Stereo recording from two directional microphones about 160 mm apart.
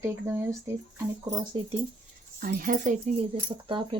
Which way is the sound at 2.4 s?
60° right (ahead or behind).